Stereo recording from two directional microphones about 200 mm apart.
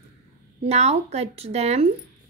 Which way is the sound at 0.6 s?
30° right (ahead or behind).